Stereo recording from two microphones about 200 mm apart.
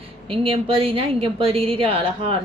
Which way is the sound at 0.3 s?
25° right (ahead or behind).